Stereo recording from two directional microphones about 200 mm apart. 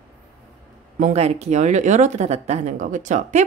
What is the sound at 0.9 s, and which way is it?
Speech, 35° right (ahead or behind).